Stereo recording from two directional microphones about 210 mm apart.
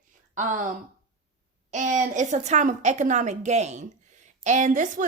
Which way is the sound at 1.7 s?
35° right (ahead or behind).